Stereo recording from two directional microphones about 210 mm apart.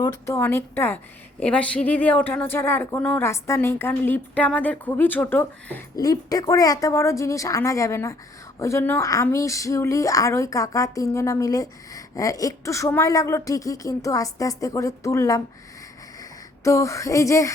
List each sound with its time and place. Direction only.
0.0 s speech: 15° left (ahead or behind)
16.6 s speech: 15° left (ahead or behind)